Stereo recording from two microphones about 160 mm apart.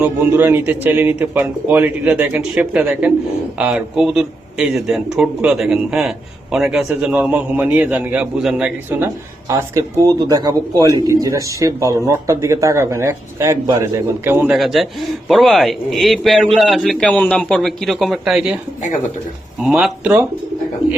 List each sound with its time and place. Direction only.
0.0 s a man's voice: 10° right (ahead or behind)
9.5 s a man's voice: 20° right (ahead or behind)
14.3 s speech: 10° right (ahead or behind)
19.6 s speech: 5° right (ahead or behind)